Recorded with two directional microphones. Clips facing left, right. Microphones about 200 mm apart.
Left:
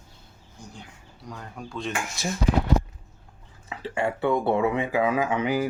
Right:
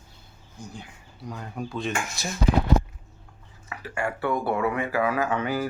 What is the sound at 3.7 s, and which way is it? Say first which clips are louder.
Speech: left 3 dB; 25° left (ahead or behind).